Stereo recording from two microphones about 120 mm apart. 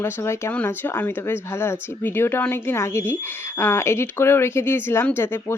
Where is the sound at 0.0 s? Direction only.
20° left (ahead or behind).